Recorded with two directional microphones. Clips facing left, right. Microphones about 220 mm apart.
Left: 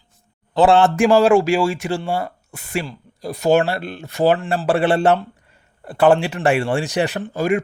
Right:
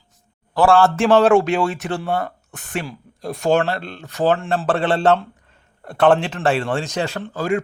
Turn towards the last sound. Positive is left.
turn(degrees=10)  # may be behind; listen again after turning